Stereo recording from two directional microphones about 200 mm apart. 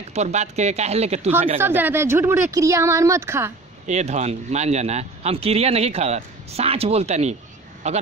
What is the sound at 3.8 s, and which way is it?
Speech, 35° right (ahead or behind).